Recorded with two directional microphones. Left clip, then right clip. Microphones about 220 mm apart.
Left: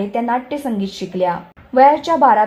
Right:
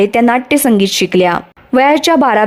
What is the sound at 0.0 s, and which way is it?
Speech, 45° right (ahead or behind).